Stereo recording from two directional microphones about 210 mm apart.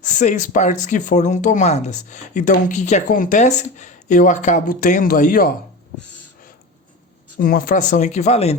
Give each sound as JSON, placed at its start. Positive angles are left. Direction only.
{"t": 0.0, "sound": "speech", "side_deg": 35}
{"t": 7.3, "sound": "speech", "side_deg": 45}